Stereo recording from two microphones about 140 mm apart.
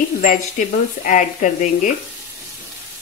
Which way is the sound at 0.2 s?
70° left (ahead or behind).